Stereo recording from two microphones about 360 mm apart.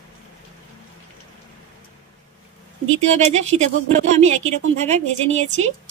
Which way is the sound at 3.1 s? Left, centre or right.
Centre.